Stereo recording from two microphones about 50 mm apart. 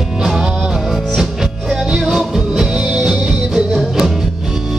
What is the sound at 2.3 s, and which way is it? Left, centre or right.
Music, centre.